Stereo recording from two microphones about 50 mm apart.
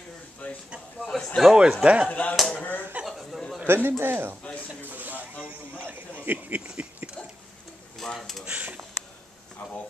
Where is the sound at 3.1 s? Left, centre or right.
Centre.